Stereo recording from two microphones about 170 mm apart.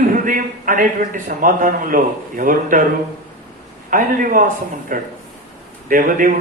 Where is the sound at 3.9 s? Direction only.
55° right (ahead or behind).